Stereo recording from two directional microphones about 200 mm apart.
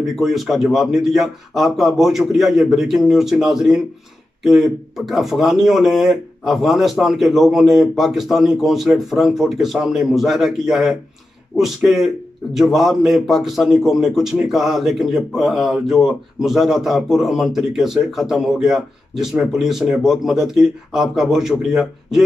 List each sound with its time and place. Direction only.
0.1 s a man's voice: centre (ahead or behind)